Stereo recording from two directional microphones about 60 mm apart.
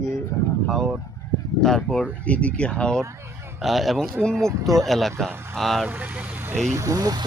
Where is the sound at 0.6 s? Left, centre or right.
Centre.